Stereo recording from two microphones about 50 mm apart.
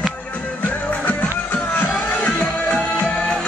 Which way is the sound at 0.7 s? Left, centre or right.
Left.